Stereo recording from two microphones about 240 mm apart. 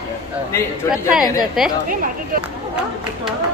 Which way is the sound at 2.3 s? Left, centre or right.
Right.